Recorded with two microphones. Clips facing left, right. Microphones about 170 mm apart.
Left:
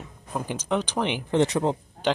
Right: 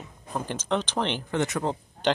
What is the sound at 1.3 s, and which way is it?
Speech, 30° left (ahead or behind).